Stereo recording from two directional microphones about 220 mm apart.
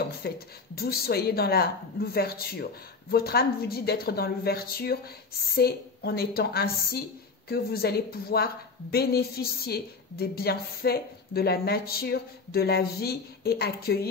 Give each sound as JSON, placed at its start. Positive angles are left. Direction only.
{"t": 0.2, "sound": "a woman's voice", "side_deg": 45}